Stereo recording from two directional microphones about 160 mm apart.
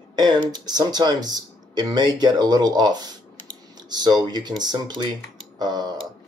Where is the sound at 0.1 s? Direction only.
25° right (ahead or behind).